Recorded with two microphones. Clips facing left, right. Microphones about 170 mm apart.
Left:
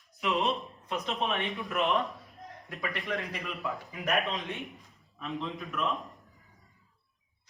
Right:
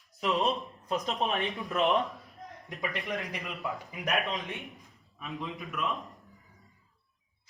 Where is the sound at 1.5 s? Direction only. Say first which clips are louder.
Right 2 dB; 20° right (ahead or behind).